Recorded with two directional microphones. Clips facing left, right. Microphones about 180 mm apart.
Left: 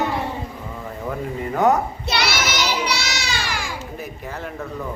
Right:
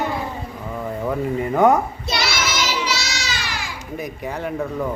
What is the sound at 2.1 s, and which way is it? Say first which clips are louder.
Child singing: left 2 dB; 65° left (ahead or behind).